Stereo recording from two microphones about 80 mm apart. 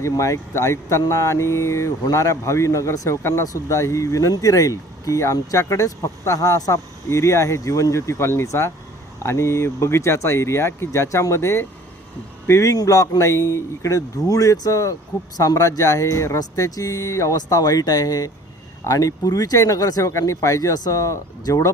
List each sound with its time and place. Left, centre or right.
0.0 s speech: left